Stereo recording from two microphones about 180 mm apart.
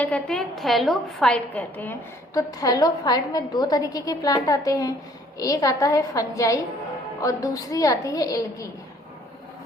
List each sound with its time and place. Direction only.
0.0 s a woman's voice: 5° left (ahead or behind)